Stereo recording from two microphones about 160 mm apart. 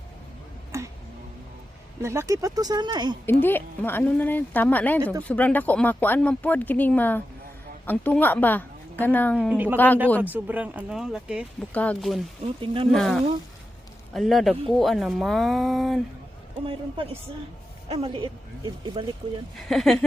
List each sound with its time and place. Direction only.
0.7 s tick-tock: 20° right (ahead or behind)
2.0 s speech: 15° right (ahead or behind)
3.2 s speech: 15° left (ahead or behind)
9.5 s speech: 10° right (ahead or behind)
9.7 s speech: 10° left (ahead or behind)
10.2 s speech: 10° right (ahead or behind)
11.7 s speech: 10° left (ahead or behind)
12.5 s speech: 35° right (ahead or behind)
12.9 s speech: 5° left (ahead or behind)
17.8 s speech: 35° right (ahead or behind)
19.5 s speech: centre (ahead or behind)